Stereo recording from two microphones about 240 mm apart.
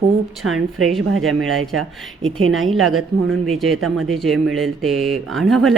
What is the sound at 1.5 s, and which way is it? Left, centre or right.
Speech, right.